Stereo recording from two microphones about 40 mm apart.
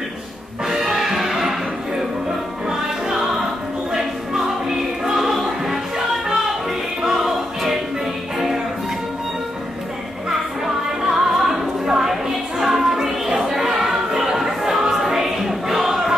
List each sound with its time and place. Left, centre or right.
0.7 s music: centre
2.7 s music: centre
11.0 s music: centre